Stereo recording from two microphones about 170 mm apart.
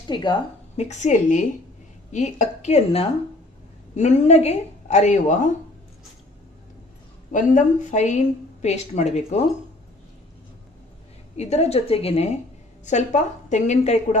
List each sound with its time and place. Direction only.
0.1 s a woman's voice: 25° left (ahead or behind)
0.8 s speech: 45° left (ahead or behind)
7.2 s a woman's voice: 50° left (ahead or behind)
11.3 s a woman's voice: 40° left (ahead or behind)